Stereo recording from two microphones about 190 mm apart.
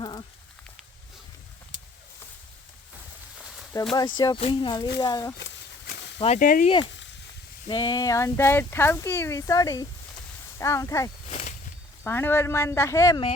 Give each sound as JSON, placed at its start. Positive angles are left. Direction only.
{"t": 0.0, "sound": "a sound", "side_deg": 20}
{"t": 3.7, "sound": "speech", "side_deg": 20}
{"t": 4.4, "sound": "speech", "side_deg": 30}
{"t": 6.1, "sound": "speech", "side_deg": 30}
{"t": 6.4, "sound": "speech", "side_deg": 45}
{"t": 7.7, "sound": "speech", "side_deg": 25}
{"t": 11.3, "sound": "a sound", "side_deg": 40}
{"t": 12.0, "sound": "speech", "side_deg": 10}